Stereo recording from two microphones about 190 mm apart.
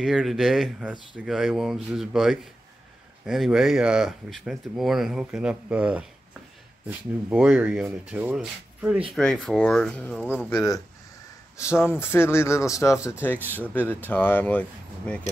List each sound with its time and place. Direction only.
0.0 s speech: centre (ahead or behind)
7.2 s speech: 5° right (ahead or behind)